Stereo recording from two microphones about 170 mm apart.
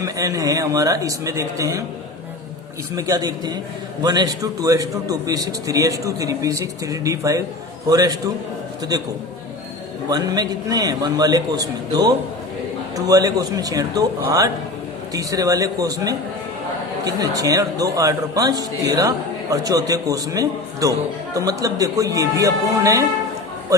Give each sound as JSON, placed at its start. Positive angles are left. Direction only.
{"t": 0.0, "sound": "a man's voice", "side_deg": -20}
{"t": 2.9, "sound": "a man's voice", "side_deg": -20}
{"t": 10.1, "sound": "a man's voice", "side_deg": -25}
{"t": 15.1, "sound": "a man's voice", "side_deg": -20}